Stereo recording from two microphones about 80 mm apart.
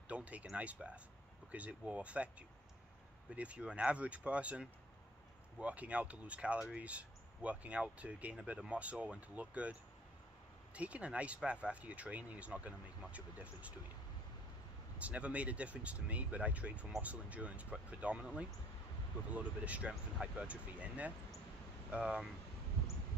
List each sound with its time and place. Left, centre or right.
0.1 s speech: centre
15.0 s speech: centre